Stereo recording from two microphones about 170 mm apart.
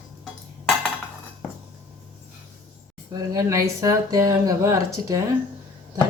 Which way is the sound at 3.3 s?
20° right (ahead or behind).